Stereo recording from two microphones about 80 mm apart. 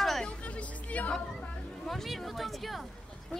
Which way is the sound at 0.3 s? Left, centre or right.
Centre.